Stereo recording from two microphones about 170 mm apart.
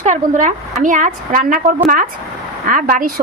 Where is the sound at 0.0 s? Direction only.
45° right (ahead or behind).